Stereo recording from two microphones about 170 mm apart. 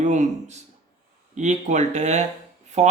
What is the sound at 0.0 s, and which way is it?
Speech, 45° right (ahead or behind).